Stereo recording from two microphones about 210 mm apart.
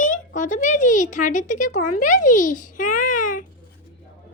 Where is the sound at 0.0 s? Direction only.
35° left (ahead or behind).